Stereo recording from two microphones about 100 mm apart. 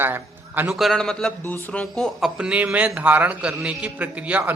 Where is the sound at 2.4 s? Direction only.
10° right (ahead or behind).